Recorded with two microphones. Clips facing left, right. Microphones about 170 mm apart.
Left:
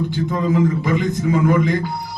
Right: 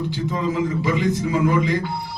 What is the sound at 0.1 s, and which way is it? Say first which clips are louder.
A man's voice: left 4 dB; 55° left (ahead or behind).